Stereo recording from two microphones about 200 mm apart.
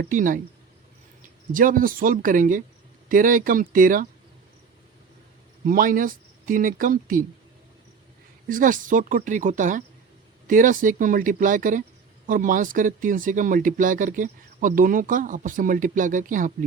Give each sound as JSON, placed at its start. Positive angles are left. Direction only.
{"t": 0.0, "sound": "speech", "side_deg": -40}
{"t": 1.5, "sound": "speech", "side_deg": -45}
{"t": 5.6, "sound": "speech", "side_deg": -45}
{"t": 8.4, "sound": "speech", "side_deg": -40}